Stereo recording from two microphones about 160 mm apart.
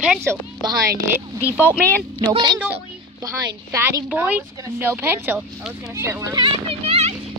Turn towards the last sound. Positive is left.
turn(degrees=-40)  # may be behind; listen again after turning